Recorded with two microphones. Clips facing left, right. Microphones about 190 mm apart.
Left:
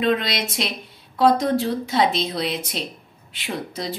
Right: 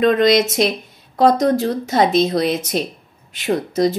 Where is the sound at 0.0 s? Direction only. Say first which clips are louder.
Right 8 dB; 45° right (ahead or behind).